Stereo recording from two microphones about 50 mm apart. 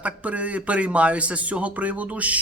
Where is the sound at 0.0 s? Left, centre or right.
Right.